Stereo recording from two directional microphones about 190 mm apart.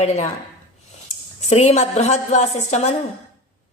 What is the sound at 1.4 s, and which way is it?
Speech, 35° left (ahead or behind).